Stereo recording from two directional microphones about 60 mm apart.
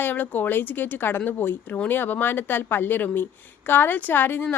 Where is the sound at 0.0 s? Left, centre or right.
Left.